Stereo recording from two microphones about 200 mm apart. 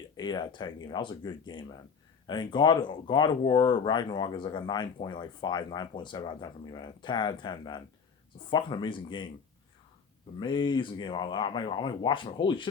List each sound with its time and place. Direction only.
0.2 s speech: 20° left (ahead or behind)
10.4 s speech: 25° left (ahead or behind)